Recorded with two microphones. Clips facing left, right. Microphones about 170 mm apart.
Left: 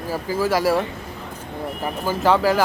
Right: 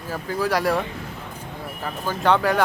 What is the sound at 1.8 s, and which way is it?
Speech, 5° left (ahead or behind).